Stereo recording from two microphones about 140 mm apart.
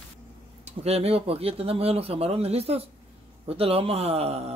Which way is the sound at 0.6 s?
50° right (ahead or behind).